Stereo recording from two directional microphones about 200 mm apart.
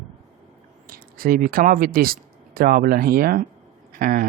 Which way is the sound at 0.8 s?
45° right (ahead or behind).